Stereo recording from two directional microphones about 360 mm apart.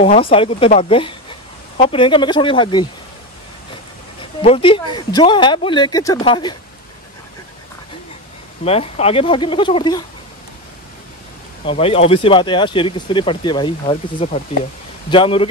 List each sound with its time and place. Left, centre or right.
0.0 s speech: centre
4.4 s speech: centre
8.6 s speech: centre
11.6 s speech: centre